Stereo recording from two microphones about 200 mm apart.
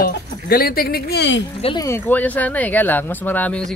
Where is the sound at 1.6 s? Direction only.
20° left (ahead or behind).